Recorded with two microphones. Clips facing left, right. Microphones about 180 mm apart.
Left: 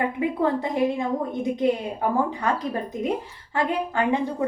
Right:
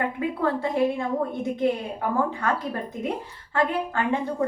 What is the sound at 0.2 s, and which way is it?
A woman's voice, 20° left (ahead or behind).